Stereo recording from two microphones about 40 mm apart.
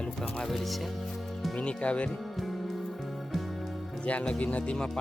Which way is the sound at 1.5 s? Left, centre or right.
Left.